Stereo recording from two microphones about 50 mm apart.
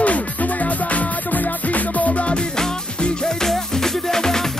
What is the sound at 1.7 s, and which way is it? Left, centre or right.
Music, left.